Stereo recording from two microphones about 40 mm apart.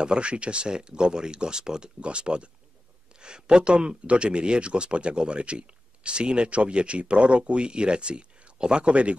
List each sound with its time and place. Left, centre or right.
0.0 s speech: right
2.0 s speech: right